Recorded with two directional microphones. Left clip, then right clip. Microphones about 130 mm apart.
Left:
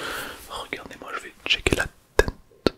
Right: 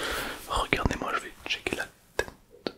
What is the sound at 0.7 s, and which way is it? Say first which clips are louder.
Whispering: right 7 dB; 90° right.